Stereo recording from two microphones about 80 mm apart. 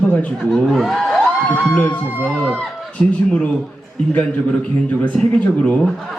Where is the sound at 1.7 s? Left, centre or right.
Centre.